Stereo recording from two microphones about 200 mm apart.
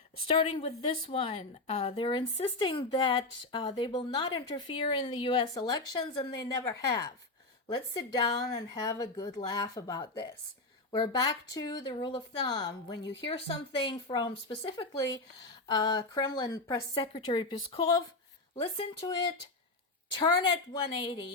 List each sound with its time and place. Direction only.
0.3 s speech: 30° left (ahead or behind)
20.1 s speech: 20° left (ahead or behind)